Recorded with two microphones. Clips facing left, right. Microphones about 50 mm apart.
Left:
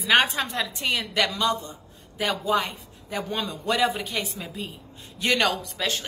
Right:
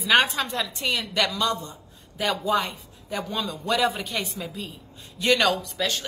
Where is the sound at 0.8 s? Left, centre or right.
Centre.